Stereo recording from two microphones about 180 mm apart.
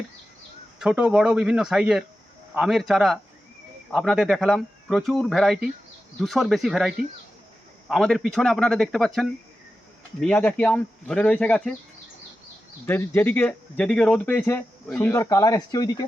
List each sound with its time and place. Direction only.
0.8 s speech: 5° right (ahead or behind)
12.8 s speech: 10° left (ahead or behind)